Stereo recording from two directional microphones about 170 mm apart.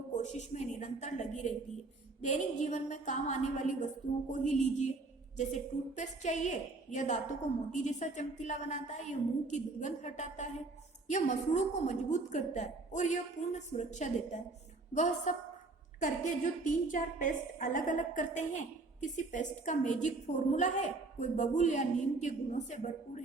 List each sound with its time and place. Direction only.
0.2 s a woman's voice: 45° left (ahead or behind)